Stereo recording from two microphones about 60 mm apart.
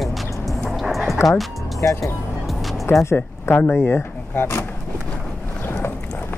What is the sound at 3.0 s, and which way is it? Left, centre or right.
Speech, left.